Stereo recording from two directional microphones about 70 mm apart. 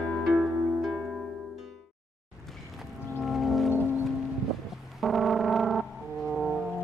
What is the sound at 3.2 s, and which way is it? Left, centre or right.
Music, centre.